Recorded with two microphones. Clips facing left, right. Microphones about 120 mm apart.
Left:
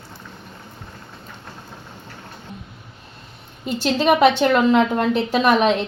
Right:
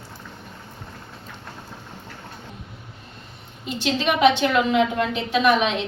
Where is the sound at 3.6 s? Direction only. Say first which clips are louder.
Left 5 dB; 45° left (ahead or behind).